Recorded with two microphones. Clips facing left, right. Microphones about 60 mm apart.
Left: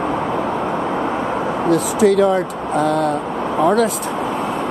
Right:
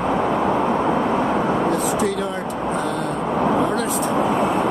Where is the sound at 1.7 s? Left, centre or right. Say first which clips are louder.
Left 6 dB; left.